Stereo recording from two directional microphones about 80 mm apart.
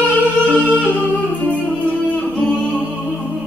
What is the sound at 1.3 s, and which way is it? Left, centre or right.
Music, left.